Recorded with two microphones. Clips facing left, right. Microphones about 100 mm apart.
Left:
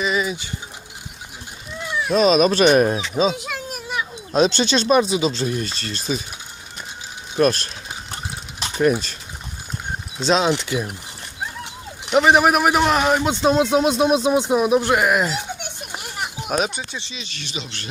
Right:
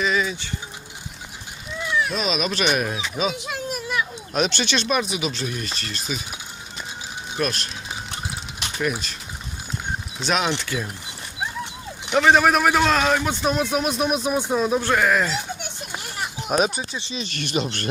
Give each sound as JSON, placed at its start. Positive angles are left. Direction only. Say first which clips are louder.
{"t": 0.0, "sound": "a sound", "louder": "left 1 dB", "side_deg": 10}
{"t": 2.0, "sound": "speech", "louder": "left 9 dB", "side_deg": 40}
{"t": 4.3, "sound": "speech", "louder": "left 7 dB", "side_deg": 30}
{"t": 7.3, "sound": "speech", "louder": "left 8 dB", "side_deg": 35}
{"t": 8.5, "sound": "typing", "louder": "left 8 dB", "side_deg": 35}
{"t": 10.2, "sound": "speech", "louder": "left 5 dB", "side_deg": 30}
{"t": 10.6, "sound": "a man's voice", "louder": "left 4 dB", "side_deg": 15}
{"t": 12.1, "sound": "a man's voice", "louder": "left 2 dB", "side_deg": 15}
{"t": 15.8, "sound": "children playing", "louder": "left 1 dB", "side_deg": 15}
{"t": 16.5, "sound": "speech", "louder": "right 2 dB", "side_deg": 0}
{"t": 17.0, "sound": "speech", "louder": "right 6 dB", "side_deg": -40}